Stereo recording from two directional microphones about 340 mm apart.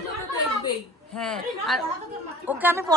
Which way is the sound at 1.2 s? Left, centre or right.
Centre.